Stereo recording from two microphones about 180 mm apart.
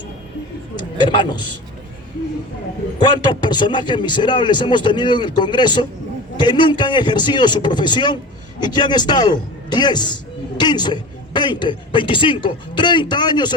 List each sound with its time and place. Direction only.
0.9 s speech: 25° left (ahead or behind)
3.0 s a man's voice: 25° left (ahead or behind)